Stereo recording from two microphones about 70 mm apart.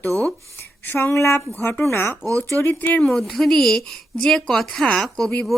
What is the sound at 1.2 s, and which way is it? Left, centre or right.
Speech, left.